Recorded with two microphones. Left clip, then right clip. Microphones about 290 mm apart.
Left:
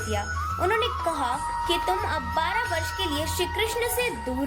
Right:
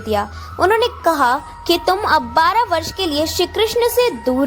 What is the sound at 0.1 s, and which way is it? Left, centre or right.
A woman's voice, right.